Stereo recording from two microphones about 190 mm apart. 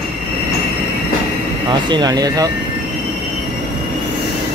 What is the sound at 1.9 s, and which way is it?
Speech, 20° right (ahead or behind).